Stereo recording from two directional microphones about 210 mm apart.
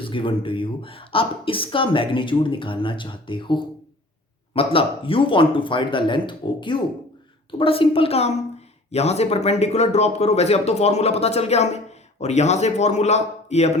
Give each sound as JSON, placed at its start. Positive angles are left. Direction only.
{"t": 0.0, "sound": "speech", "side_deg": 25}